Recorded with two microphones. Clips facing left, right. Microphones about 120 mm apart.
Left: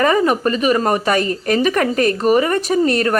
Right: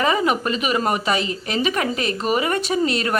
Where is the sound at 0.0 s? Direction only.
45° left (ahead or behind).